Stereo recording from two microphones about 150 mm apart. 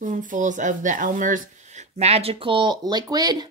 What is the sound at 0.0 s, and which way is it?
Speech, 60° right (ahead or behind).